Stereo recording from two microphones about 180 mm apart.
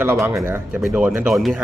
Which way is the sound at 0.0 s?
10° right (ahead or behind).